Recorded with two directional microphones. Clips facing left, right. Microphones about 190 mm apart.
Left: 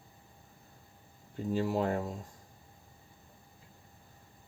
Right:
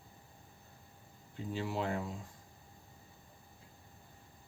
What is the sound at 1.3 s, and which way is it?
Speech, 45° left (ahead or behind).